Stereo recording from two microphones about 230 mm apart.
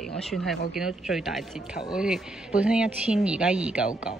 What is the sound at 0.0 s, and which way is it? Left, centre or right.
A man's voice, centre.